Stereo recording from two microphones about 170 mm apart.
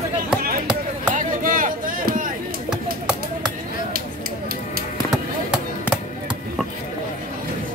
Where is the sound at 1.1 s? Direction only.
50° right (ahead or behind).